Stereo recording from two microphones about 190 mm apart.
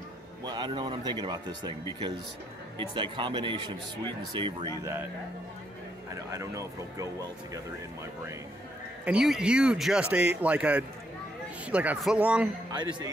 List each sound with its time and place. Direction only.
0.4 s speech: 25° right (ahead or behind)
6.3 s speech: 15° right (ahead or behind)
9.0 s speech: 5° right (ahead or behind)